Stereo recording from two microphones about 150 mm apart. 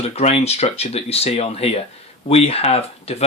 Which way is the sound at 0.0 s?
45° left (ahead or behind).